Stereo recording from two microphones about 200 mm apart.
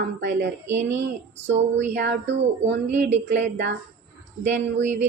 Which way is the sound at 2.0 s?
60° right (ahead or behind).